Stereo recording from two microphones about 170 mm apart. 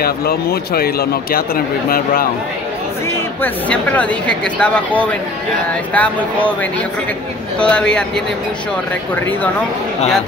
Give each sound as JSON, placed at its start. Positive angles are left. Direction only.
{"t": 0.0, "sound": "speech", "side_deg": 65}
{"t": 3.4, "sound": "speech", "side_deg": 10}